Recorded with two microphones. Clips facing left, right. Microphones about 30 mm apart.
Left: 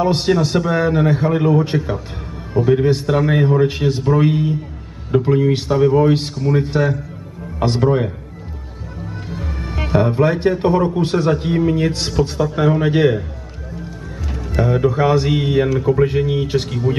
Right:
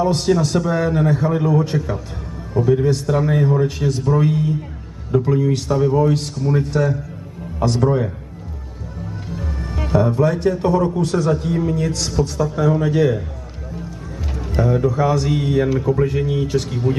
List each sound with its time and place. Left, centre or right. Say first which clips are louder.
0.0 s a man's voice: left 1 dB; left
9.3 s music: left 1 dB; left
9.9 s a man's voice: left 1 dB; left
14.6 s a man's voice: left 2 dB; left